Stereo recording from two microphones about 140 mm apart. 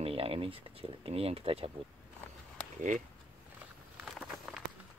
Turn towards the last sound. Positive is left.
turn(degrees=0)  # may be behind; listen again after turning